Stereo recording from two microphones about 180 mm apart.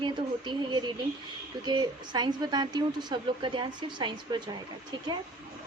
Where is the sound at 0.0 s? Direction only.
25° right (ahead or behind).